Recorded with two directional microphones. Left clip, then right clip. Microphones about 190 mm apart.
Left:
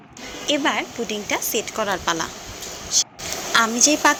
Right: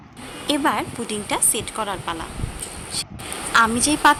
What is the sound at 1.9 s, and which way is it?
Speech, 20° left (ahead or behind).